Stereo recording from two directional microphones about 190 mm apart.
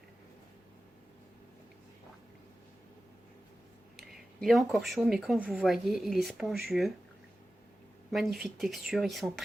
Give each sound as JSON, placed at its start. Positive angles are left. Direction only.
{"t": 4.1, "sound": "a sound", "side_deg": 0}
{"t": 4.8, "sound": "speech", "side_deg": 0}
{"t": 8.1, "sound": "speech", "side_deg": 0}